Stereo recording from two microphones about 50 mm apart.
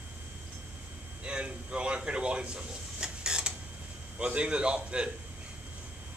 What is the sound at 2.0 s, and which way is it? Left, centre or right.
Creak, centre.